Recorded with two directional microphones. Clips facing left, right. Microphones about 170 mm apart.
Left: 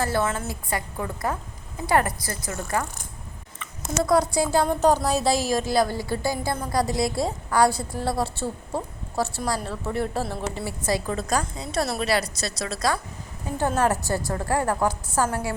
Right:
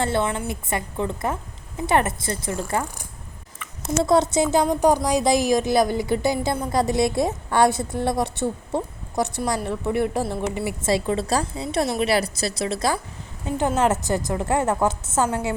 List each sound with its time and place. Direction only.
0.0 s a woman's voice: 25° right (ahead or behind)
4.0 s a woman's voice: 25° right (ahead or behind)